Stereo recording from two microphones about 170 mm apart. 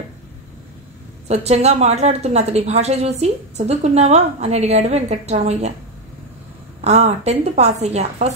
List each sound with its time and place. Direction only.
1.2 s a woman's voice: 40° right (ahead or behind)
6.8 s a woman's voice: 40° right (ahead or behind)